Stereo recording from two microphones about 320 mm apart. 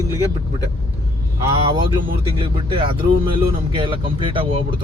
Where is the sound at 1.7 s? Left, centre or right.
Centre.